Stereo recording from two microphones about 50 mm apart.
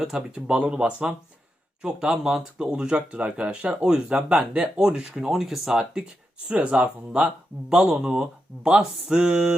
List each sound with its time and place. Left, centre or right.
0.0 s speech: centre
6.6 s speech: right
7.1 s speech: centre